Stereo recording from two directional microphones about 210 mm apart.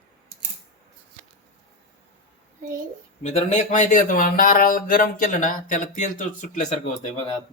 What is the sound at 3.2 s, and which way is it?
Speech, 35° left (ahead or behind).